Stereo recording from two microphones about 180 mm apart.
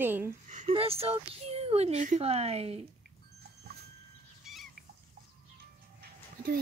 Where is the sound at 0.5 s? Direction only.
40° right (ahead or behind).